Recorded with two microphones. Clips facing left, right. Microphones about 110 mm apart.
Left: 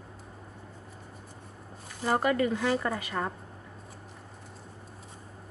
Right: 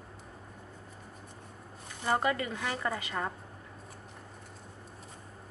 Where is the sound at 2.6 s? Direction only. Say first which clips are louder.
Left 6 dB; centre (ahead or behind).